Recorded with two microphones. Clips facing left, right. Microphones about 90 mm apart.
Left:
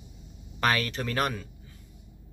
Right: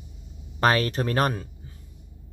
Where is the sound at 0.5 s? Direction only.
35° right (ahead or behind).